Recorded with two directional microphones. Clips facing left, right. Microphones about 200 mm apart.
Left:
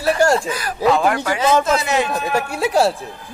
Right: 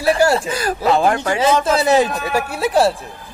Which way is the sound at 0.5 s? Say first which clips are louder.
Even; 30° right (ahead or behind).